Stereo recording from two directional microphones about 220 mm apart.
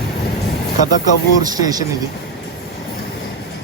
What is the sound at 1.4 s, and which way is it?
Speech, 15° right (ahead or behind).